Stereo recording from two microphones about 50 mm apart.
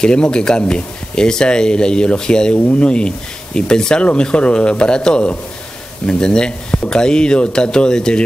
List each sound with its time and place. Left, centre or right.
0.0 s speech: centre